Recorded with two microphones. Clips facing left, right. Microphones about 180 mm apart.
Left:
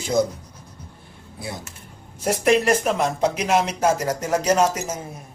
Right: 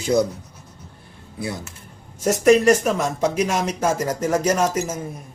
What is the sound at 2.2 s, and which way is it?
Speech, 45° right (ahead or behind).